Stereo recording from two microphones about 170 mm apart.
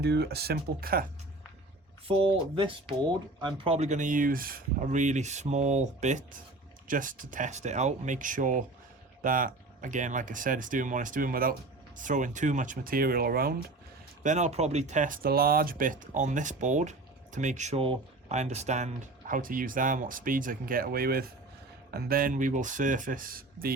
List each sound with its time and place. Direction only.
0.0 s speech: 75° right (ahead or behind); by 1.0 s 60° right (ahead or behind)
2.0 s speech: 35° right (ahead or behind)
3.8 s speech: 45° right (ahead or behind); by 13.6 s 65° right (ahead or behind)
14.3 s speech: 45° right (ahead or behind)
19.3 s speech: 55° right (ahead or behind)